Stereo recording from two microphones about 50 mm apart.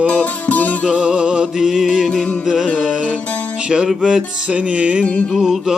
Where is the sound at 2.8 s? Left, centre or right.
Centre.